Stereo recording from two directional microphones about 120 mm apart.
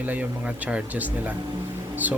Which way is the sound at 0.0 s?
15° right (ahead or behind).